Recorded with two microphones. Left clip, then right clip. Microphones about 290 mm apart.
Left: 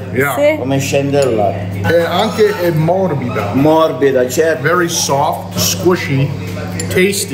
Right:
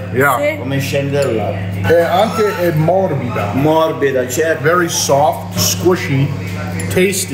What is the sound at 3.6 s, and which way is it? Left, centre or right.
Speech, centre.